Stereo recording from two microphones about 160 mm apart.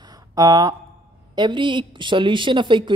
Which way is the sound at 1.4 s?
30° right (ahead or behind).